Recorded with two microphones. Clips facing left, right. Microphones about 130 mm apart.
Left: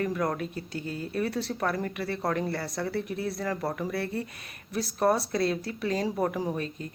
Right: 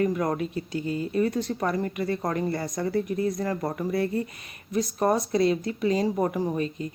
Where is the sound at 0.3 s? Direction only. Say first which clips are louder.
Right 5 dB; 55° left (ahead or behind).